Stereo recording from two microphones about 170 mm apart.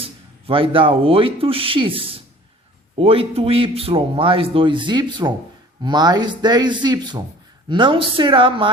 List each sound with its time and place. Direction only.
0.4 s speech: 30° right (ahead or behind)